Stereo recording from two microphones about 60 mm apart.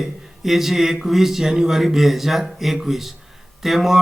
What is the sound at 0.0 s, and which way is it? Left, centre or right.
Speech, centre.